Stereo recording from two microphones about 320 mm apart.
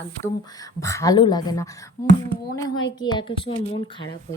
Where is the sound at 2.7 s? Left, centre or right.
Left.